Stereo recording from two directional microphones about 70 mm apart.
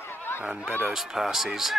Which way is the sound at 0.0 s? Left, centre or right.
Left.